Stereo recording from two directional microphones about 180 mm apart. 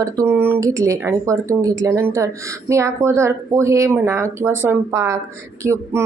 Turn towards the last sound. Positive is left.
turn(degrees=-15)  # may be behind; listen again after turning